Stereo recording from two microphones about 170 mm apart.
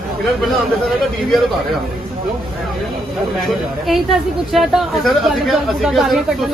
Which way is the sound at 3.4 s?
Centre (ahead or behind).